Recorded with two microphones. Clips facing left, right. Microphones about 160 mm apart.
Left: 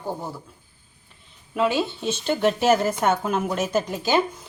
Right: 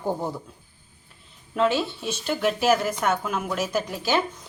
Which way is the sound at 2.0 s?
25° left (ahead or behind).